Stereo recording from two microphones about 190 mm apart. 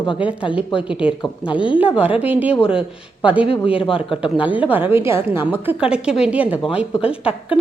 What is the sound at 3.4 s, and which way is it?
Speech, 30° left (ahead or behind).